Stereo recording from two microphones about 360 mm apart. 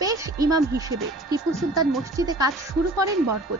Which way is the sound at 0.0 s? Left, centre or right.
Centre.